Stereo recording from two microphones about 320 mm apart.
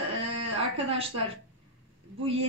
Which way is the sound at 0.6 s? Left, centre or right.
Centre.